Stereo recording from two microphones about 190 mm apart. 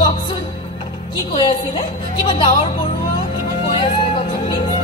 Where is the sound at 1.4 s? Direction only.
25° left (ahead or behind).